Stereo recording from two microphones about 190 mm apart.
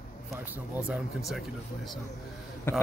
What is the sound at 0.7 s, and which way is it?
Speech, 5° right (ahead or behind).